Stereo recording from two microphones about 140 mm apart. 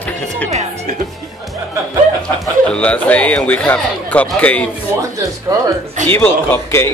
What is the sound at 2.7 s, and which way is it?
Speech, 10° left (ahead or behind).